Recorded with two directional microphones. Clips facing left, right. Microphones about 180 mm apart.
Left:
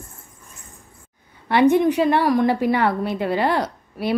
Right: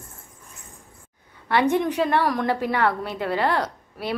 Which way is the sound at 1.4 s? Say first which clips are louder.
Left 5 dB; 15° left (ahead or behind).